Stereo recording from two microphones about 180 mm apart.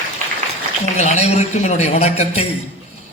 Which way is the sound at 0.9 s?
40° left (ahead or behind).